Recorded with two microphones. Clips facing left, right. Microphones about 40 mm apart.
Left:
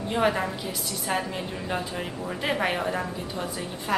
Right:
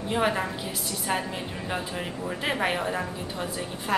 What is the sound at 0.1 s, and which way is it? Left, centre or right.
A woman's voice, centre.